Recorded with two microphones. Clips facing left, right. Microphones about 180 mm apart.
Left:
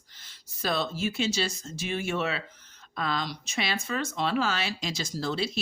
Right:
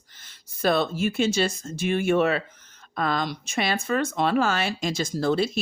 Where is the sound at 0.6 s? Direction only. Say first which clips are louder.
Right 7 dB; 55° right (ahead or behind).